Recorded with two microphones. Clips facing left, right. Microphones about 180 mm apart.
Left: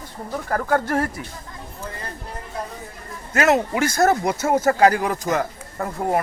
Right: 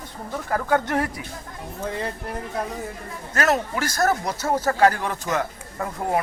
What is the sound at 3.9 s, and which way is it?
Speech, 25° left (ahead or behind).